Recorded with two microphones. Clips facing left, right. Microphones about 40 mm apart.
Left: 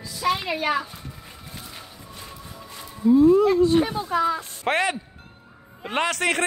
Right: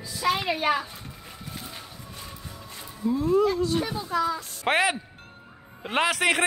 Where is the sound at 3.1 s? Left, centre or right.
Centre.